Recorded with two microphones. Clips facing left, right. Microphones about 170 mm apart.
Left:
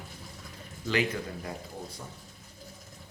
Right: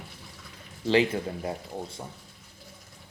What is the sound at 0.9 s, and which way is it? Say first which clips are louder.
Speech: right 6 dB; 25° right (ahead or behind).